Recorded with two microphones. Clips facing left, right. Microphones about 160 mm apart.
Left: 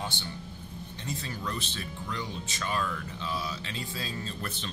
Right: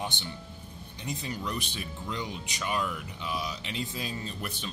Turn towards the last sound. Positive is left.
turn(degrees=-15)  # may be behind; listen again after turning